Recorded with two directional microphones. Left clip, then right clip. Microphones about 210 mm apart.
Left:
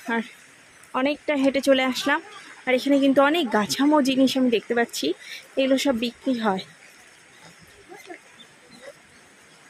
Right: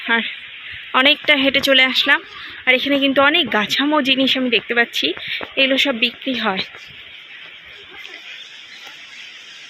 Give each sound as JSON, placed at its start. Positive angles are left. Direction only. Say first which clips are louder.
{"t": 0.1, "sound": "speech", "louder": "right 9 dB", "side_deg": 5}